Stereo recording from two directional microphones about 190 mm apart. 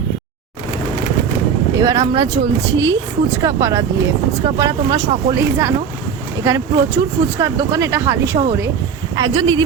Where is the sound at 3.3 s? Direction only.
15° right (ahead or behind).